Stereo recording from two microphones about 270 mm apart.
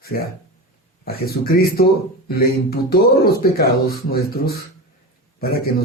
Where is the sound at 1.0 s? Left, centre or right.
Left.